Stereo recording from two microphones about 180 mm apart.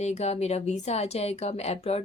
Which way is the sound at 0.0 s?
40° left (ahead or behind).